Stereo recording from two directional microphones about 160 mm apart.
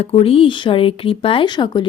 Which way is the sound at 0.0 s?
40° left (ahead or behind).